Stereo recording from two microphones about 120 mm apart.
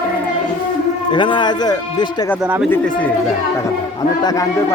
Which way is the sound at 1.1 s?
40° left (ahead or behind).